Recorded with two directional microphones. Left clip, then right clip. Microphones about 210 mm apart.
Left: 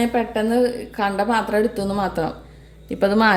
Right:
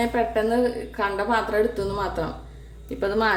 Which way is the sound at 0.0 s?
35° left (ahead or behind).